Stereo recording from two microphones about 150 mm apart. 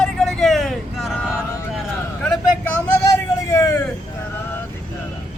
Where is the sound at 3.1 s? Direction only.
20° left (ahead or behind).